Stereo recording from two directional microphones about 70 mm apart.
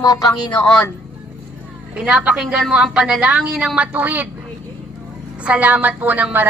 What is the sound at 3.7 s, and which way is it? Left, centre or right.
Speech, right.